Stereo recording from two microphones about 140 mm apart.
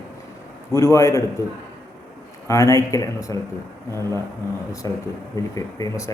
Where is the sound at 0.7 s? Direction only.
20° left (ahead or behind).